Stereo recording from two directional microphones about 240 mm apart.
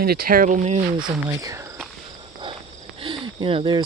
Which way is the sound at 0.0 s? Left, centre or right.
Right.